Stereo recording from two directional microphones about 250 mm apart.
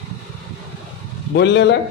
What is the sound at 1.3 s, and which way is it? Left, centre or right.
Speech, left.